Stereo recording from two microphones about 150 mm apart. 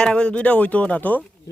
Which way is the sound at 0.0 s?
5° left (ahead or behind).